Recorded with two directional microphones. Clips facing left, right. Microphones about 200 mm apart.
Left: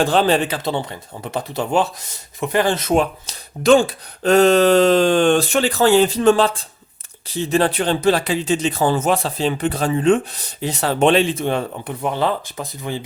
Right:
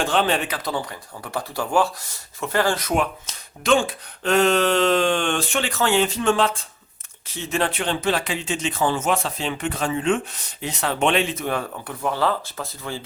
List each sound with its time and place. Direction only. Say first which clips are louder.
0.0 s speech: left 5 dB; 35° left (ahead or behind); by 13.1 s 15° left (ahead or behind)